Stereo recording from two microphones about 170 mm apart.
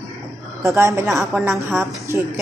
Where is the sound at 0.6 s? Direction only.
15° right (ahead or behind).